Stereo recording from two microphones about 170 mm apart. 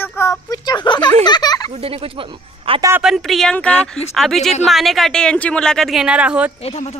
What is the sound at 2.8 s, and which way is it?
Speech, 15° right (ahead or behind).